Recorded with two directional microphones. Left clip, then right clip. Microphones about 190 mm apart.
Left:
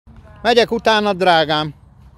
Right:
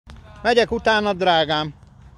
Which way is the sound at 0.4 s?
20° left (ahead or behind).